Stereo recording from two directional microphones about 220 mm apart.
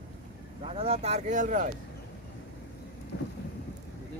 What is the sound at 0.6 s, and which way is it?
Speech, 25° right (ahead or behind).